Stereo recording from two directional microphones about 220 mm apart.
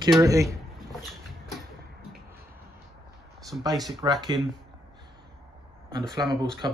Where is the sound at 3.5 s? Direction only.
10° right (ahead or behind).